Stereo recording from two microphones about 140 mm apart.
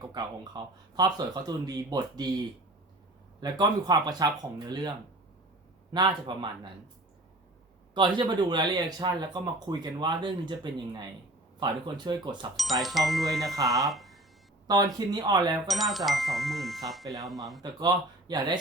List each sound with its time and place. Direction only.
0.1 s speech: 30° right (ahead or behind)
3.4 s speech: 30° right (ahead or behind)
7.9 s speech: 35° right (ahead or behind)
12.5 s speech: centre (ahead or behind)
13.8 s a sound: centre (ahead or behind)
14.7 s speech: 30° right (ahead or behind)
15.6 s speech: centre (ahead or behind)
17.6 s speech: 30° right (ahead or behind)